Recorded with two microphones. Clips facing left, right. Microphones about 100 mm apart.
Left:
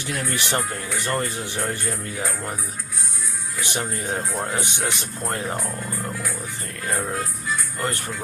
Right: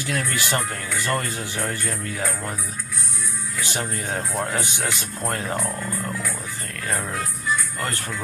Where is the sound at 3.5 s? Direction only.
20° left (ahead or behind).